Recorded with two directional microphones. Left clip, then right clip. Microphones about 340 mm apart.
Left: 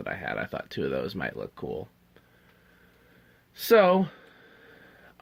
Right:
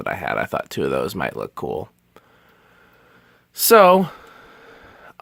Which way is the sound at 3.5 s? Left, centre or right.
Centre.